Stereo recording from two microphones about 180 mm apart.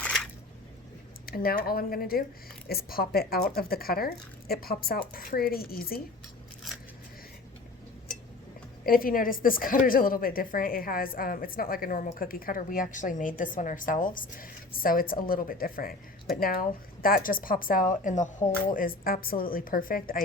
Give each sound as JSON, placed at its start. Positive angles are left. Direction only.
{"t": 0.0, "sound": "a sound", "side_deg": 5}
{"t": 1.3, "sound": "speech", "side_deg": 55}
{"t": 8.9, "sound": "a woman's voice", "side_deg": 55}